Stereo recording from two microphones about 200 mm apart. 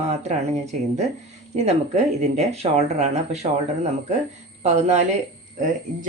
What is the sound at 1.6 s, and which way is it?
Speech, 35° right (ahead or behind).